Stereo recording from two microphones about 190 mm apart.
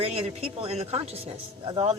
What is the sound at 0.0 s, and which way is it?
Speech, 35° right (ahead or behind).